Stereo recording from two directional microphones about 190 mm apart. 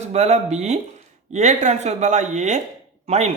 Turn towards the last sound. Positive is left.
turn(degrees=-35)  # may be behind; listen again after turning